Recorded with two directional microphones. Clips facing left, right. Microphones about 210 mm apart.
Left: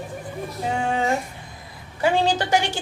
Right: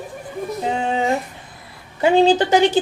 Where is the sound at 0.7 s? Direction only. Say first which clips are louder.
Right 1 dB; 20° right (ahead or behind).